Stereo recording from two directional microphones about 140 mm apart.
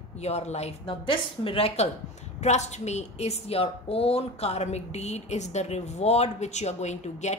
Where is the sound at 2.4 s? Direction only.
55° left (ahead or behind).